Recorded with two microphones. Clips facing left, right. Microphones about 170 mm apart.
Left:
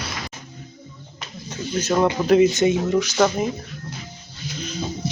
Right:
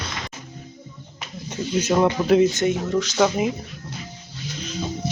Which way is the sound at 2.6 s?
15° left (ahead or behind).